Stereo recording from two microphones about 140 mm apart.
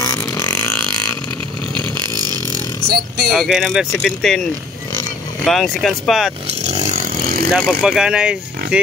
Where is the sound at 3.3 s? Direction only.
Centre (ahead or behind).